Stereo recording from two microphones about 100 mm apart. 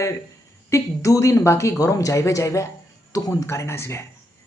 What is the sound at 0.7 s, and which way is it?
A man's voice, 30° left (ahead or behind).